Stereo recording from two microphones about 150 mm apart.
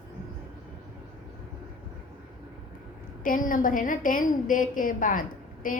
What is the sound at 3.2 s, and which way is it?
A woman's voice, 65° left (ahead or behind).